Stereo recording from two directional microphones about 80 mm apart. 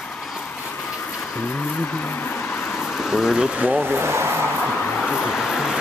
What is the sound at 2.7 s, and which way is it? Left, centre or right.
Speech, centre.